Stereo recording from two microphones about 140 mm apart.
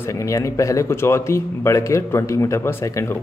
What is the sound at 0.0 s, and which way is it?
A man's voice, 20° left (ahead or behind).